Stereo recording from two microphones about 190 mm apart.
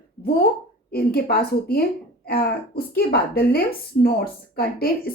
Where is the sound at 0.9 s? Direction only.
55° left (ahead or behind).